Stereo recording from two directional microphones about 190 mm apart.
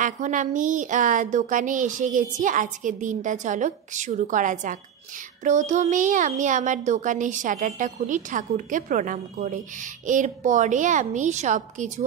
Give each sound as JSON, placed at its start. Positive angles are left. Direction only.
{"t": 0.0, "sound": "a child's voice", "side_deg": -40}